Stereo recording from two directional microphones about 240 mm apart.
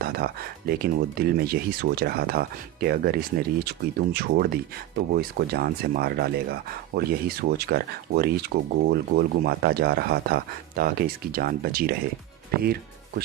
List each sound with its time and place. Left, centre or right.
0.0 s speech: right